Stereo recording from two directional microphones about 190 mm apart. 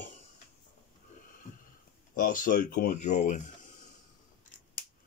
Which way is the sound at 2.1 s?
45° left (ahead or behind).